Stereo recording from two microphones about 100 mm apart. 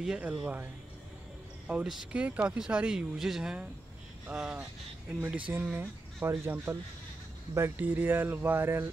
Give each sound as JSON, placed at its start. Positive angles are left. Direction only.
{"t": 0.0, "sound": "speech", "side_deg": -10}
{"t": 1.7, "sound": "speech", "side_deg": -5}
{"t": 6.2, "sound": "speech", "side_deg": -25}